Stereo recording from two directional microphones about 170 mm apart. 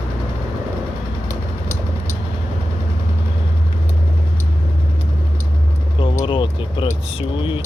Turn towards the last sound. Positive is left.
turn(degrees=30)  # may be behind; listen again after turning